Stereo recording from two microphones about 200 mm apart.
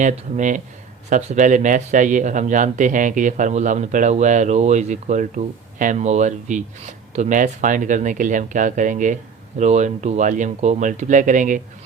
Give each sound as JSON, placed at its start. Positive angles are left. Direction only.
{"t": 0.0, "sound": "speech", "side_deg": -40}